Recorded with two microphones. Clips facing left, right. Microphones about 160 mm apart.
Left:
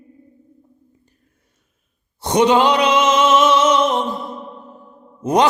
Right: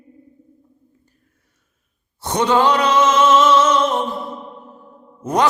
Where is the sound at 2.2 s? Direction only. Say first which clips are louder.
Left 2 dB; 15° left (ahead or behind).